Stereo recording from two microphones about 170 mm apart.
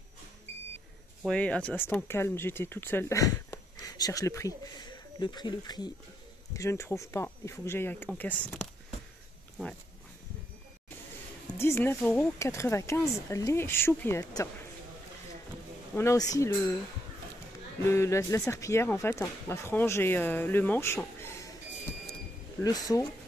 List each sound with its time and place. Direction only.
1.2 s speech: 5° left (ahead or behind)
11.5 s speech: 15° left (ahead or behind)
15.9 s speech: 15° left (ahead or behind)
17.8 s speech: 15° left (ahead or behind)
22.6 s speech: 20° left (ahead or behind)